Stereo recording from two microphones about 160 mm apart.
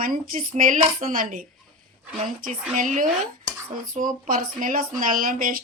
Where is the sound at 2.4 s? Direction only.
55° right (ahead or behind).